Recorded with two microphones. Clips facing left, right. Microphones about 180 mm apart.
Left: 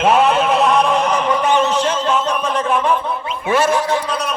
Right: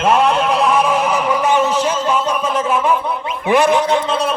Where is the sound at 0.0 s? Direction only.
Centre (ahead or behind).